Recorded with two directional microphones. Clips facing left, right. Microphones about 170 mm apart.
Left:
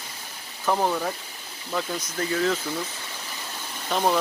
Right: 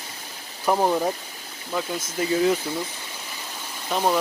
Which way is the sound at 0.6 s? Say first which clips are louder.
Right 3 dB; 15° right (ahead or behind).